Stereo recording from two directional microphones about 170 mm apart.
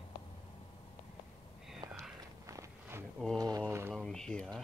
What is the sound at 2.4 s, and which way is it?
Walk, 20° right (ahead or behind).